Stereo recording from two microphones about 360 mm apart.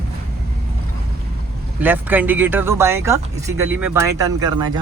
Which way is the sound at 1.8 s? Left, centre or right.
Centre.